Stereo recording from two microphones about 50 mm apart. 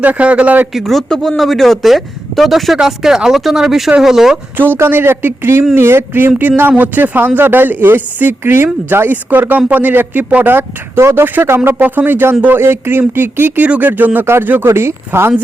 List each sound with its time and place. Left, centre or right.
0.0 s a man's voice: right
0.7 s speech: centre
1.1 s speech: centre
2.8 s speech: centre
4.5 s speech: right
11.8 s speech: right
12.6 s speech: right
13.6 s speech: right
14.7 s speech: right